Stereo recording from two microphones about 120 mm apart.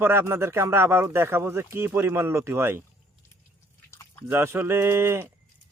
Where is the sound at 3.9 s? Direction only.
20° left (ahead or behind).